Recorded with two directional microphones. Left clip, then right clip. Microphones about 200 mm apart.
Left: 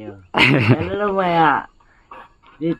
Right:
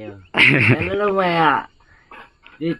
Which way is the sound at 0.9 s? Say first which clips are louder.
Even; centre (ahead or behind).